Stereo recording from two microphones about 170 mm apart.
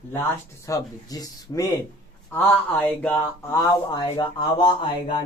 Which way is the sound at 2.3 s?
10° left (ahead or behind).